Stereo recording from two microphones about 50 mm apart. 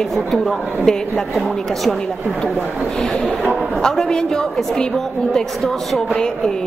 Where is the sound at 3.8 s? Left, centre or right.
Centre.